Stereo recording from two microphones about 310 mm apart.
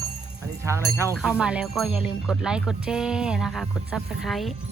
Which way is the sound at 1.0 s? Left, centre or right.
Centre.